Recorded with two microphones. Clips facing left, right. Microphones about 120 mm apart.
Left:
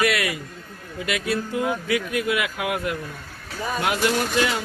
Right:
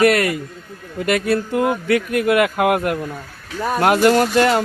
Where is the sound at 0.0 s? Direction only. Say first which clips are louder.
Right 8 dB; 50° right (ahead or behind).